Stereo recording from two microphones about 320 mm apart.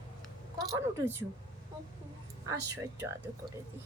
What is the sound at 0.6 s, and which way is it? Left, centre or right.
Speech, centre.